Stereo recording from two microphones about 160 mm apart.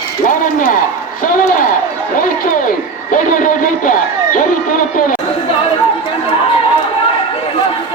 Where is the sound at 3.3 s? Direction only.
55° left (ahead or behind).